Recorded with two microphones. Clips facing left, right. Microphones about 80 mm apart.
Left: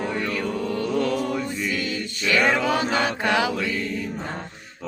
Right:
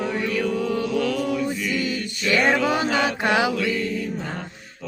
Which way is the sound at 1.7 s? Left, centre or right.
Right.